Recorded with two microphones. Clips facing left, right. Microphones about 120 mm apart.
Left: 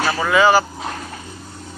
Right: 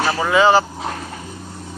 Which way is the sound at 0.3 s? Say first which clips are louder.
Even; 25° right (ahead or behind).